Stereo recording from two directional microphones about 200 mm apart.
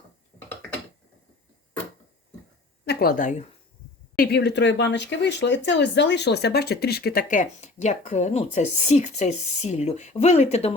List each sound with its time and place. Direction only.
2.8 s speech: 50° left (ahead or behind)
4.2 s a woman's voice: 55° left (ahead or behind); by 10.8 s 30° left (ahead or behind)